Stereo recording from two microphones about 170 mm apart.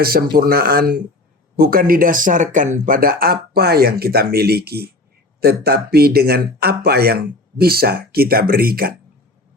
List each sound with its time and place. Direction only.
0.0 s speech: 60° right (ahead or behind)